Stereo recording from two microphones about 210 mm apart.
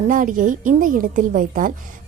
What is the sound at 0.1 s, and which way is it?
A woman's voice, 40° right (ahead or behind).